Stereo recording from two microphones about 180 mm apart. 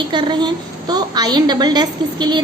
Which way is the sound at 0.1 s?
25° right (ahead or behind).